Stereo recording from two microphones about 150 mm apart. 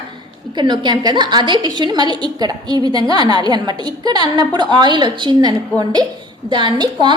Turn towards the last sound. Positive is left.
turn(degrees=-30)  # may be behind; listen again after turning